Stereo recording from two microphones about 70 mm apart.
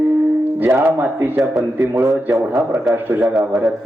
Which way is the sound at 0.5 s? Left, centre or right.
Right.